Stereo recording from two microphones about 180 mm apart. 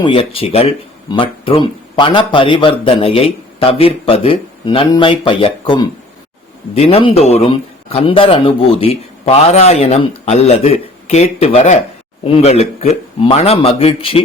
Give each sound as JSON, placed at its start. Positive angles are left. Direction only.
{"t": 0.0, "sound": "speech", "side_deg": 30}